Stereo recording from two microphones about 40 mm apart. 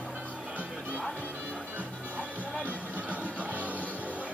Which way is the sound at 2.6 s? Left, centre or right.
Right.